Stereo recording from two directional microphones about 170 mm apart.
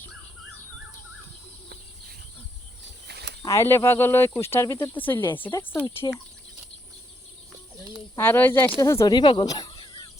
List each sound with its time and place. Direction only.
3.1 s a sound: 80° right
3.4 s speech: 15° left (ahead or behind)
8.1 s speech: 10° left (ahead or behind); by 10.1 s 30° left (ahead or behind)